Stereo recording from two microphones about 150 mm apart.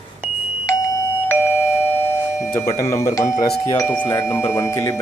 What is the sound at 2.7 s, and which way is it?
Speech, 20° left (ahead or behind).